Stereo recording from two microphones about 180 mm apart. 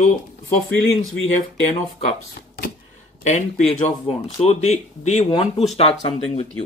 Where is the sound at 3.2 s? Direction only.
40° left (ahead or behind).